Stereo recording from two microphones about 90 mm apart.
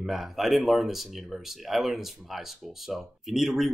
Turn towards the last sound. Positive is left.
turn(degrees=-5)  # may be behind; listen again after turning